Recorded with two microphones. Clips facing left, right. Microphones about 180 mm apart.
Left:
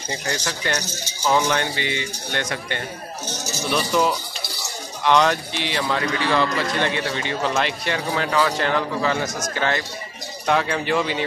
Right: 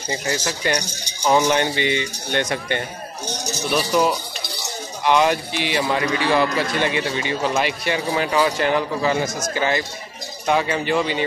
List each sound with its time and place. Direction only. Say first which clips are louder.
0.5 s a man's voice: right 3 dB; 15° right (ahead or behind)